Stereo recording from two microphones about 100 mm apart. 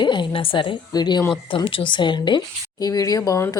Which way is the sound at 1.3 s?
55° left (ahead or behind).